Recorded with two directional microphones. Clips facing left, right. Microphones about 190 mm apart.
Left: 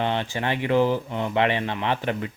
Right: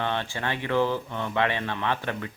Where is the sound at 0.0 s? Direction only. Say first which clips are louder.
Left 4 dB; 15° left (ahead or behind).